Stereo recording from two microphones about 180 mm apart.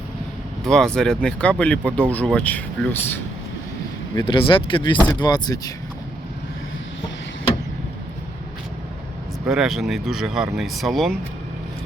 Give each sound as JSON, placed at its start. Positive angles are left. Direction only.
{"t": 0.6, "sound": "speech", "side_deg": 0}
{"t": 4.1, "sound": "speech", "side_deg": 25}
{"t": 9.5, "sound": "speech", "side_deg": 0}